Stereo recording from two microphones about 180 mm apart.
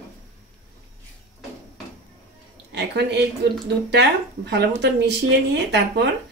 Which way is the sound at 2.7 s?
70° right (ahead or behind).